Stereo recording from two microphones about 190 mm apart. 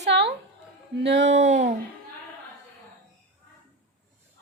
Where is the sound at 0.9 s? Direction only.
65° right (ahead or behind).